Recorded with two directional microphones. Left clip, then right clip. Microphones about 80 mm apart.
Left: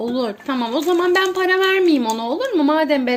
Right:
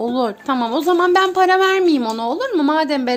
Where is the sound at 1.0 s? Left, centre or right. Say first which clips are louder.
Right 3 dB; right.